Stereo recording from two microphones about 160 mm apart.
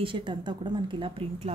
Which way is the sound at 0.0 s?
30° right (ahead or behind).